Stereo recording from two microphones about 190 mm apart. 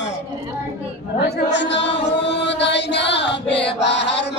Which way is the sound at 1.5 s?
65° left (ahead or behind).